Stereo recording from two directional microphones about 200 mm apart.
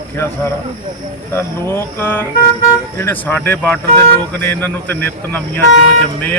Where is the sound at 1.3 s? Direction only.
10° left (ahead or behind).